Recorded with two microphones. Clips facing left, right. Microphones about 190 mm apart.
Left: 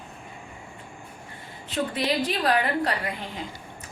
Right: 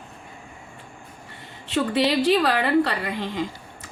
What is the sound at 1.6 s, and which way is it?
A woman's voice, 80° right.